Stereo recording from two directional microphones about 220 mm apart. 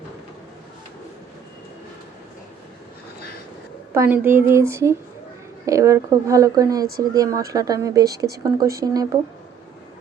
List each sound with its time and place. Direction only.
3.9 s speech: 10° right (ahead or behind)